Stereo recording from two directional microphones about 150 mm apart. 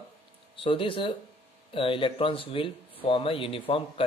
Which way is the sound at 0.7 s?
35° left (ahead or behind).